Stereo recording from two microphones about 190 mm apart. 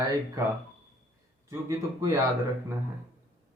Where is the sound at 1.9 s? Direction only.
15° right (ahead or behind).